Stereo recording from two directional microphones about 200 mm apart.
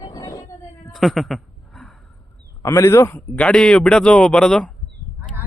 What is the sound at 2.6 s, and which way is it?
Speech, 15° left (ahead or behind).